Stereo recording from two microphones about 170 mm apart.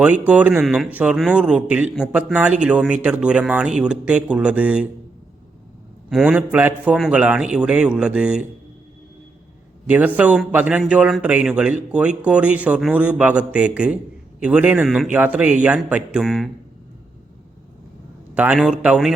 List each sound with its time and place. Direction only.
0.0 s a man's voice: 10° right (ahead or behind)
6.1 s a man's voice: 5° right (ahead or behind)
9.8 s a man's voice: 10° right (ahead or behind)
18.3 s a man's voice: 5° right (ahead or behind)